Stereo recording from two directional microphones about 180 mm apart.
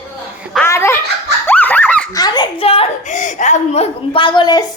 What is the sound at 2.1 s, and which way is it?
A woman's voice, 25° left (ahead or behind).